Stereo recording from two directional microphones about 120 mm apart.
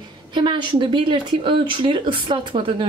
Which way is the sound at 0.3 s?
40° right (ahead or behind).